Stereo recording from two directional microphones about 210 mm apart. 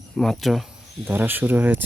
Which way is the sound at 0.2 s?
Centre (ahead or behind).